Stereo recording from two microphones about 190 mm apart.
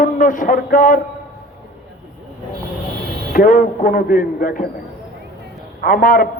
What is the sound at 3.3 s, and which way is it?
A man's voice, 45° left (ahead or behind).